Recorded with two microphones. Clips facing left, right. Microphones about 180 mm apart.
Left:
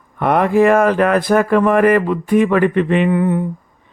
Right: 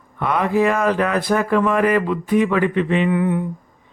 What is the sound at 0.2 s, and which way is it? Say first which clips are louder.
Mantra: left 5 dB; 55° left (ahead or behind).